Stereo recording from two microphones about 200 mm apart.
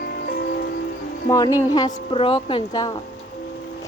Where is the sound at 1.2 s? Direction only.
20° left (ahead or behind).